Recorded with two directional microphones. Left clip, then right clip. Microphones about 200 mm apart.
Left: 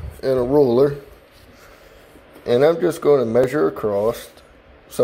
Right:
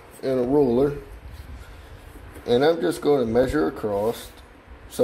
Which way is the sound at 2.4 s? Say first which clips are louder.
Left 4 dB; 35° left (ahead or behind).